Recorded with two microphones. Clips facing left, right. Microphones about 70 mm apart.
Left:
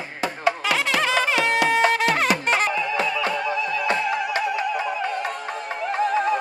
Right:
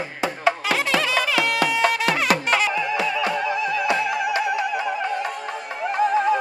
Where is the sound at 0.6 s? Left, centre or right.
Right.